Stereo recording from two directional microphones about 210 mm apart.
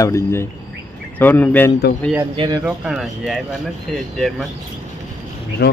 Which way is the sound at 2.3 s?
20° right (ahead or behind).